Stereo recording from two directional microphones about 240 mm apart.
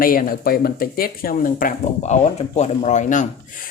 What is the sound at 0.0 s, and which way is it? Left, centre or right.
Speech, left.